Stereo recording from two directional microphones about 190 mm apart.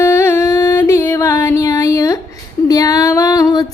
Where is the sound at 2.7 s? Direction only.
20° left (ahead or behind).